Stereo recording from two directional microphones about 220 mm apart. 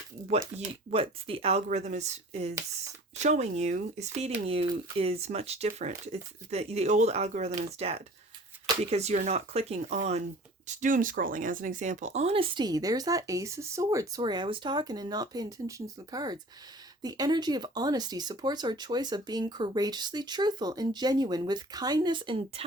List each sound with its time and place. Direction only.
0.3 s speech: 30° right (ahead or behind)